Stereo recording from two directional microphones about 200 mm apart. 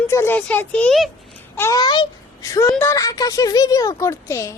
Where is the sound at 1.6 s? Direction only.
15° left (ahead or behind).